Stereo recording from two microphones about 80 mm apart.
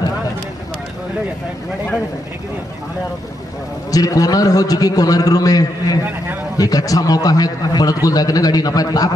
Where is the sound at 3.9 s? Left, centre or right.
Left.